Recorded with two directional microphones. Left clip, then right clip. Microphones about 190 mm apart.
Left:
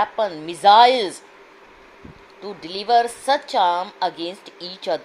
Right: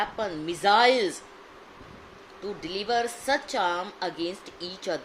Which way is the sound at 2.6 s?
10° left (ahead or behind).